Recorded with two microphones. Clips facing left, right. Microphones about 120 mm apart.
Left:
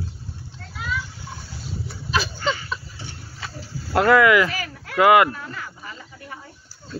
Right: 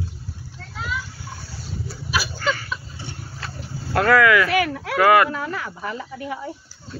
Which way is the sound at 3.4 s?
Centre (ahead or behind).